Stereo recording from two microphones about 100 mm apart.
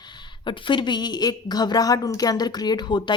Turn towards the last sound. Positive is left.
turn(degrees=50)  # may be behind; listen again after turning